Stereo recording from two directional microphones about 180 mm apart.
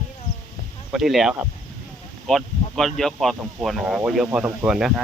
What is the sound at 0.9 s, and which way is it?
Speech, centre (ahead or behind).